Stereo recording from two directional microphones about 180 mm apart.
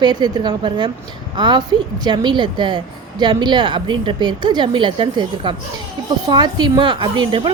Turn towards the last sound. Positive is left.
turn(degrees=-25)  # may be behind; listen again after turning